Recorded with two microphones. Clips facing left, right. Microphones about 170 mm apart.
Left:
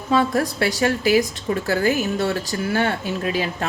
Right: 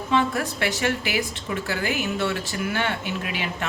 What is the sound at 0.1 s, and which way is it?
Speech, 35° left (ahead or behind).